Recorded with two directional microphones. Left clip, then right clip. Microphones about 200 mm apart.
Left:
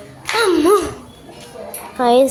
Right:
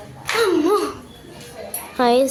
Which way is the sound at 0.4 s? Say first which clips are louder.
Left 5 dB; 25° left (ahead or behind).